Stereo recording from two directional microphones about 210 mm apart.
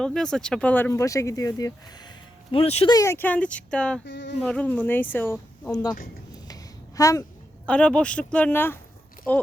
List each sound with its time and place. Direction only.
0.0 s speech: 5° left (ahead or behind)
4.0 s insect: 55° left (ahead or behind)
4.4 s speech: 5° left (ahead or behind)
6.5 s a sound: 15° left (ahead or behind)
7.7 s speech: 5° left (ahead or behind)